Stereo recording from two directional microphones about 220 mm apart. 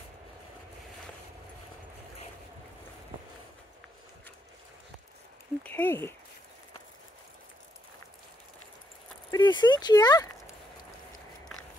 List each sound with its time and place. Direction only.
5.6 s speech: 10° left (ahead or behind)
9.3 s speech: 20° left (ahead or behind)